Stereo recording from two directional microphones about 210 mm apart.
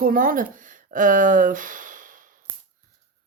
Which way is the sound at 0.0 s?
40° right (ahead or behind).